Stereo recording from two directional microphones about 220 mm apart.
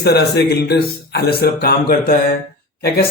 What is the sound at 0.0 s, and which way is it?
Speech, 45° left (ahead or behind).